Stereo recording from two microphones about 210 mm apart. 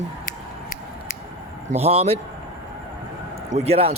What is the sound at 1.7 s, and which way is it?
Speech, 30° right (ahead or behind).